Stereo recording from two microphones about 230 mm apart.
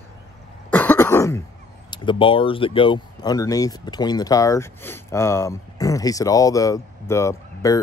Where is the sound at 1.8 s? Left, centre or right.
Left.